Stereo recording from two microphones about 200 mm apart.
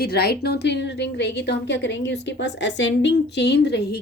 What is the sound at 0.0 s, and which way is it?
A woman's voice, 50° left (ahead or behind).